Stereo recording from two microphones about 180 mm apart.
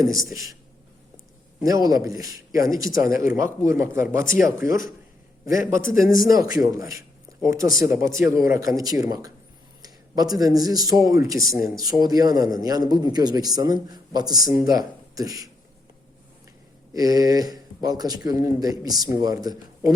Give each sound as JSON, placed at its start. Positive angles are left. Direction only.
{"t": 0.0, "sound": "speech", "side_deg": -20}
{"t": 1.6, "sound": "a man's voice", "side_deg": -20}
{"t": 16.9, "sound": "a man's voice", "side_deg": -20}